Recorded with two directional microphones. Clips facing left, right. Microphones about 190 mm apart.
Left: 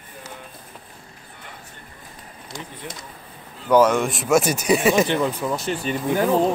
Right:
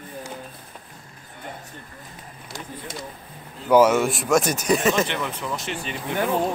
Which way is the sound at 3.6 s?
10° right (ahead or behind).